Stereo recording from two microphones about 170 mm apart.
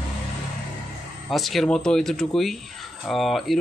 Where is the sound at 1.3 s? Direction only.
Centre (ahead or behind).